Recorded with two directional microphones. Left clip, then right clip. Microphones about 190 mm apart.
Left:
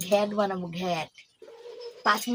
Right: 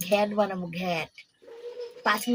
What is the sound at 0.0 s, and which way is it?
Speech, 15° left (ahead or behind).